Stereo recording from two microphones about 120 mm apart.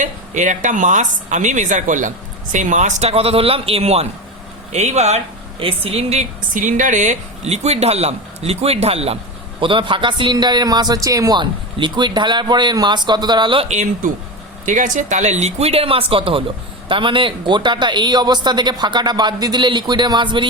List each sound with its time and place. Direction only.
0.0 s a woman's voice: 90° right; by 4.0 s 60° right (ahead or behind)
4.7 s speech: 70° right (ahead or behind)
9.6 s a man's voice: 45° right (ahead or behind)
13.7 s a man's voice: 80° right; by 20.5 s 40° right (ahead or behind)